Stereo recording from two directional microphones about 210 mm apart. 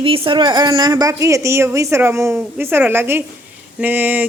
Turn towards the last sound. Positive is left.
turn(degrees=-10)  # may be behind; listen again after turning